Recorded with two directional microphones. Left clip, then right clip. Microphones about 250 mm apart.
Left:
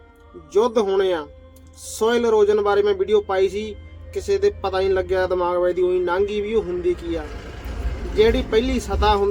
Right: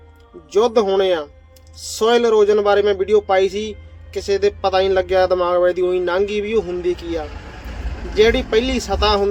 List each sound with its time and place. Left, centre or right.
0.5 s a man's voice: centre